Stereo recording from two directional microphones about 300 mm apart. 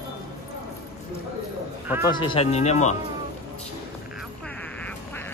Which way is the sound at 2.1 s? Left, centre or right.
Centre.